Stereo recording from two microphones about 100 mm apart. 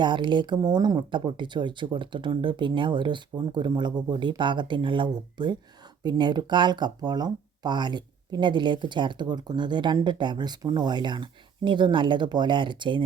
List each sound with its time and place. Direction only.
0.0 s speech: 50° right (ahead or behind)